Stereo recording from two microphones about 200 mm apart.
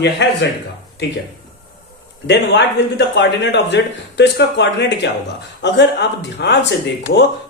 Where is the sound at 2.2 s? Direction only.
60° left (ahead or behind).